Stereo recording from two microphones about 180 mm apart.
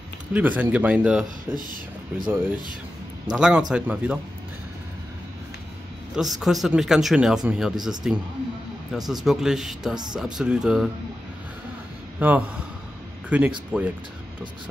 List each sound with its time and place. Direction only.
0.3 s a man's voice: 10° right (ahead or behind)
1.6 s speech: 50° right (ahead or behind)
3.3 s speech: 5° right (ahead or behind)
6.1 s speech: centre (ahead or behind)
12.2 s a man's voice: 10° right (ahead or behind)